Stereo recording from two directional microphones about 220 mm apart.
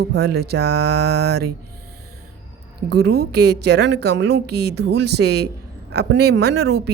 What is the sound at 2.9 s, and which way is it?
A woman's voice, 50° right (ahead or behind).